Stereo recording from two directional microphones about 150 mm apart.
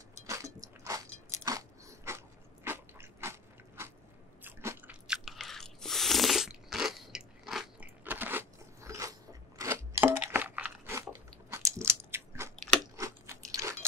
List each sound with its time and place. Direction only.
0.3 s biting: 20° right (ahead or behind)
5.0 s crunch: 5° right (ahead or behind)
11.5 s biting: 15° right (ahead or behind)
12.9 s crunch: 20° right (ahead or behind)